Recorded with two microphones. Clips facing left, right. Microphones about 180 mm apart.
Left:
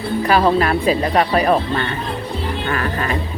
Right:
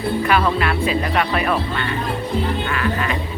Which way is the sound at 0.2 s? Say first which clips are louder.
Left 6 dB; 35° left (ahead or behind).